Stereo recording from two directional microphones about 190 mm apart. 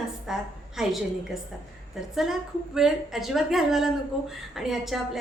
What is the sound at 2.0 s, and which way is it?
A woman's voice, centre (ahead or behind).